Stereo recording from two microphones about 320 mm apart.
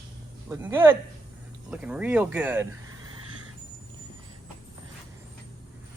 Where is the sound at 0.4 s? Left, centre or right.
Centre.